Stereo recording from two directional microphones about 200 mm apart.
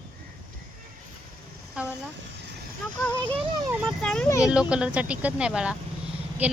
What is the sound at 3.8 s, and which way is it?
A child's voice, 5° left (ahead or behind).